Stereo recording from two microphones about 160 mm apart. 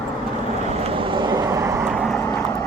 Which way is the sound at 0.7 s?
35° right (ahead or behind).